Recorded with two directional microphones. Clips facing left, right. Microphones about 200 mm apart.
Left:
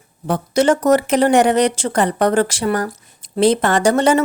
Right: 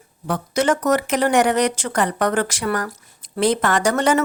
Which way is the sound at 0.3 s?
30° left (ahead or behind).